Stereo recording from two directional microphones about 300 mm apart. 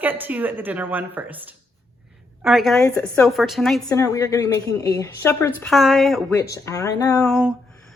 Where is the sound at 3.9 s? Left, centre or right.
Centre.